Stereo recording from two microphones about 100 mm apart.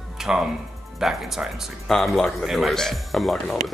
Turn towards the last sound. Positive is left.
turn(degrees=0)  # may be behind; listen again after turning